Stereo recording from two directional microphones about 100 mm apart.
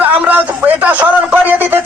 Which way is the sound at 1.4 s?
20° right (ahead or behind).